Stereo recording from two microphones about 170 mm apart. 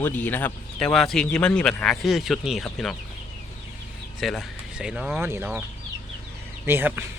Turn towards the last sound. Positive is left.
turn(degrees=-10)  # may be behind; listen again after turning